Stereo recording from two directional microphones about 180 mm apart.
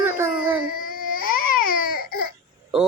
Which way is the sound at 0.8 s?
50° left (ahead or behind).